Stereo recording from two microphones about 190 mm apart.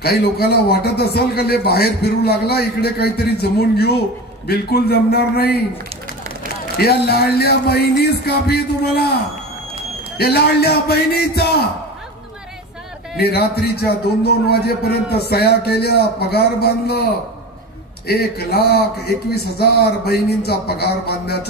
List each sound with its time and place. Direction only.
0.0 s a man's voice: 55° left (ahead or behind)
6.8 s a man's voice: 55° left (ahead or behind)
10.1 s a man's voice: 55° left (ahead or behind)
13.2 s a man's voice: 55° left (ahead or behind)